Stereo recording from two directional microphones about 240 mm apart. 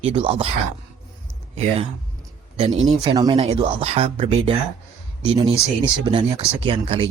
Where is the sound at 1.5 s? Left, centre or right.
Right.